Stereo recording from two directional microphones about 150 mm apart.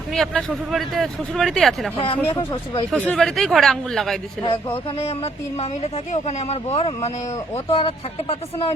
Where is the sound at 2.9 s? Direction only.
Centre (ahead or behind).